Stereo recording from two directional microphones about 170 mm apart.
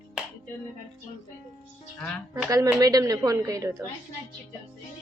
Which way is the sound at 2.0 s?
Centre (ahead or behind).